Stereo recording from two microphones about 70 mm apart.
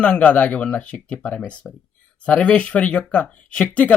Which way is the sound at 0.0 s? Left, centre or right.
Centre.